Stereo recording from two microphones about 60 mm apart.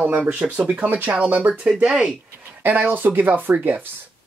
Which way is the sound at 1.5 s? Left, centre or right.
Centre.